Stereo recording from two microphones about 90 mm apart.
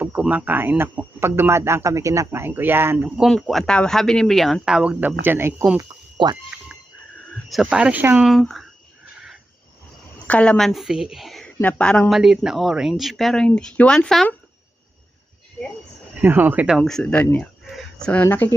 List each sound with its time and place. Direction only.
0.0 s speech: 15° right (ahead or behind)
3.2 s speech: 5° left (ahead or behind); by 5.6 s 25° right (ahead or behind)
6.2 s speech: 55° right (ahead or behind)
7.7 s speech: 10° right (ahead or behind)
8.3 s speech: centre (ahead or behind)
10.2 s a woman's voice: 15° left (ahead or behind)
10.6 s speech: centre (ahead or behind)
11.4 s speech: 10° left (ahead or behind)
12.1 s speech: 5° right (ahead or behind)
16.2 s speech: 20° right (ahead or behind)
16.6 s speech: centre (ahead or behind)
17.7 s a sound: centre (ahead or behind)
18.1 s speech: 20° left (ahead or behind)